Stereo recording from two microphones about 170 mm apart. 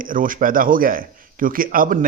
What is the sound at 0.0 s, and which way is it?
A man's voice, 55° right (ahead or behind).